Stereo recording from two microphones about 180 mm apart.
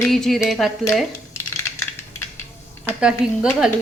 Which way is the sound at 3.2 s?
5° right (ahead or behind).